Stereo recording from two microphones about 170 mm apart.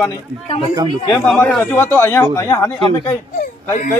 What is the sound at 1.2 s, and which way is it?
A man's voice, 5° left (ahead or behind).